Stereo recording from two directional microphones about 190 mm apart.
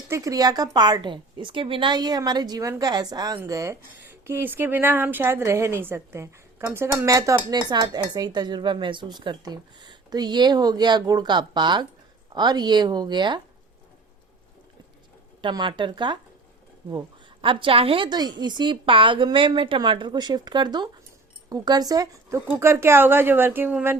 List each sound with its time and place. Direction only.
0.1 s a woman's voice: 20° right (ahead or behind)
15.4 s a woman's voice: 25° right (ahead or behind)
17.4 s a woman's voice: 25° right (ahead or behind); by 24.0 s 10° right (ahead or behind)